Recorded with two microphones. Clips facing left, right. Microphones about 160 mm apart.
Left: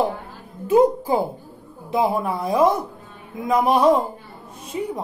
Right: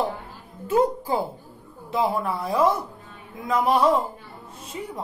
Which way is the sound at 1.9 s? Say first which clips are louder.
Left 3 dB; 15° left (ahead or behind).